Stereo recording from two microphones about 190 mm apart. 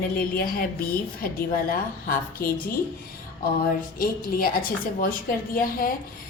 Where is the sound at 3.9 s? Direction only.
50° left (ahead or behind).